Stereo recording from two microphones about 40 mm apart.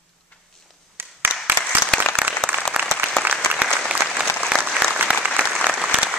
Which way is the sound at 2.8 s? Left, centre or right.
Right.